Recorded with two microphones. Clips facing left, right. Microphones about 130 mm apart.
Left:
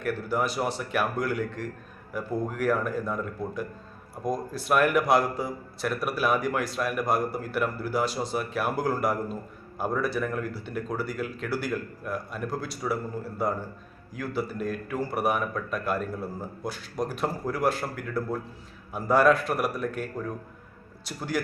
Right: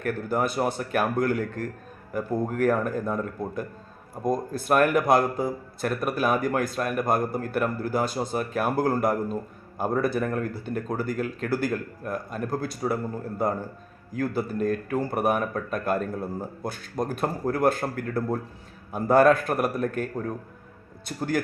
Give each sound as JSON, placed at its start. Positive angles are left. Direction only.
{"t": 0.0, "sound": "a man's voice", "side_deg": -50}
{"t": 14.1, "sound": "a man's voice", "side_deg": -50}
{"t": 21.1, "sound": "a man's voice", "side_deg": -50}